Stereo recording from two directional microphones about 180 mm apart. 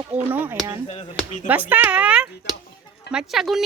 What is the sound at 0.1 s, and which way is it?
Speech, 10° right (ahead or behind).